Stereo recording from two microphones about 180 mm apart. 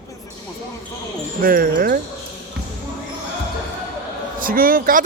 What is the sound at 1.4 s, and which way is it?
Speech, 50° right (ahead or behind).